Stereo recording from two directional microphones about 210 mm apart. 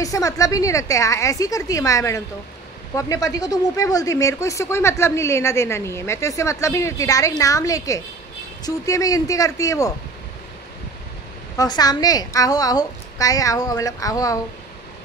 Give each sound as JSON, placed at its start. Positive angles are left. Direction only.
{"t": 0.0, "sound": "speech", "side_deg": 15}
{"t": 11.5, "sound": "speech", "side_deg": 20}